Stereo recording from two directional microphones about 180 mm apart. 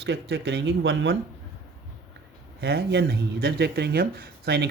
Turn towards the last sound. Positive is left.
turn(degrees=-65)  # may be behind; listen again after turning